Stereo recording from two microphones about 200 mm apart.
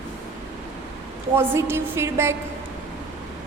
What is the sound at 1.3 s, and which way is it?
A woman's voice, 10° right (ahead or behind).